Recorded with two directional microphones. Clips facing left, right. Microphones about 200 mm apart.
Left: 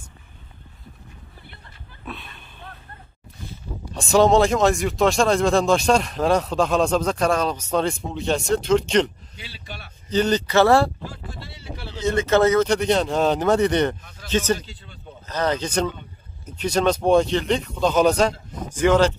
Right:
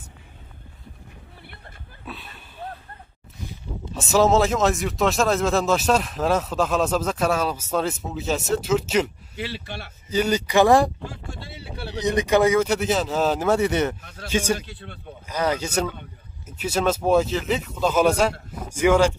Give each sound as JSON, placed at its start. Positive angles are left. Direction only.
{"t": 3.9, "sound": "speech", "side_deg": -5}
{"t": 9.4, "sound": "speech", "side_deg": -70}
{"t": 10.0, "sound": "speech", "side_deg": -10}
{"t": 11.9, "sound": "speech", "side_deg": -15}
{"t": 14.7, "sound": "speech", "side_deg": -70}
{"t": 15.2, "sound": "speech", "side_deg": -10}